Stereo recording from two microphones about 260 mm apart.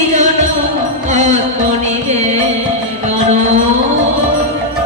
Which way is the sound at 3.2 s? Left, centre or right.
Right.